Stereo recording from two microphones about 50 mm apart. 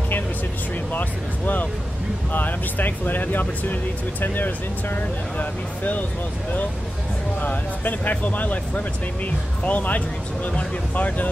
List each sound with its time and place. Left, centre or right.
0.9 s music: left
2.3 s speech: left
7.4 s speech: left